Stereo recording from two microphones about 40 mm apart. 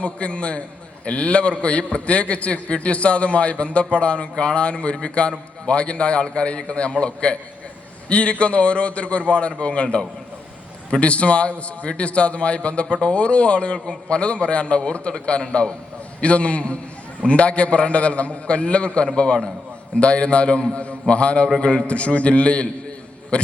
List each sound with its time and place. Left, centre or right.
0.0 s a man's voice: left